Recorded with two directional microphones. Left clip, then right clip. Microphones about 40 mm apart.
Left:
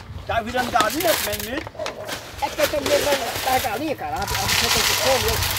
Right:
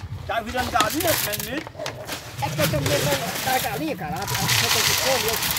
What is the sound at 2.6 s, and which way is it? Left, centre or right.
Speech, right.